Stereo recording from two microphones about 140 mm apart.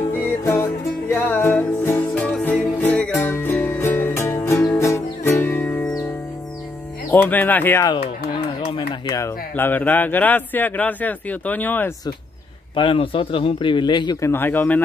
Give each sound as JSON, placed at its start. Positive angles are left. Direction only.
{"t": 0.2, "sound": "music", "side_deg": 20}
{"t": 7.1, "sound": "a man's voice", "side_deg": 15}
{"t": 8.4, "sound": "a sound", "side_deg": 35}
{"t": 9.1, "sound": "a man's voice", "side_deg": 15}
{"t": 12.7, "sound": "a man's voice", "side_deg": 40}
{"t": 14.2, "sound": "a man's voice", "side_deg": 15}